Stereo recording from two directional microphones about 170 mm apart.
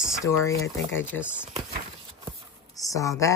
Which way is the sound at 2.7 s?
20° left (ahead or behind).